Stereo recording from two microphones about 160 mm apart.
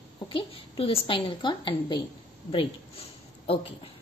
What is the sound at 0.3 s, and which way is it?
A woman's voice, 35° left (ahead or behind).